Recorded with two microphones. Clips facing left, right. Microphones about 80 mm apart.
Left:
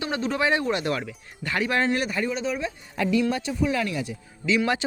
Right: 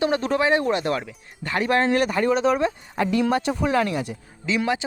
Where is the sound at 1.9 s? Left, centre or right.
Right.